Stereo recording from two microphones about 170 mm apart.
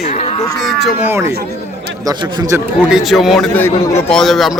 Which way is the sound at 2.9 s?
Centre (ahead or behind).